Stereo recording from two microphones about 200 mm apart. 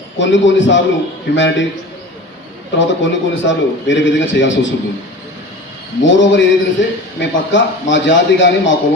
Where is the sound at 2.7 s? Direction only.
65° left (ahead or behind).